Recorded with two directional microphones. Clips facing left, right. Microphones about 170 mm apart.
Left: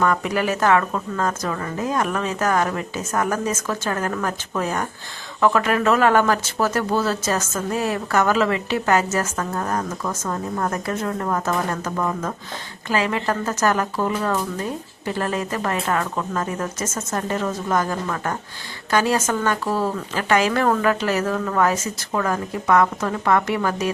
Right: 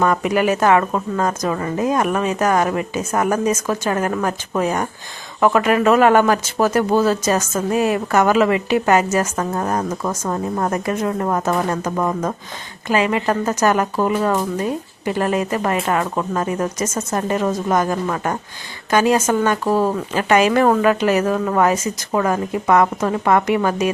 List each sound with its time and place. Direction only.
0.0 s speech: 20° right (ahead or behind)